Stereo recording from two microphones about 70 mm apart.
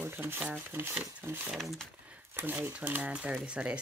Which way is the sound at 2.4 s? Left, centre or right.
Right.